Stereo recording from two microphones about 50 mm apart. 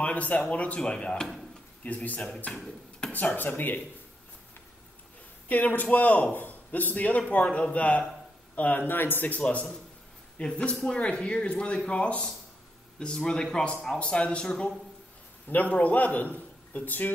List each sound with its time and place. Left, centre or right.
0.0 s speech: left
0.7 s speech: centre
1.8 s a man's voice: left
2.5 s speech: centre
3.1 s a man's voice: left
5.5 s a man's voice: left
10.3 s speech: left
15.4 s a man's voice: left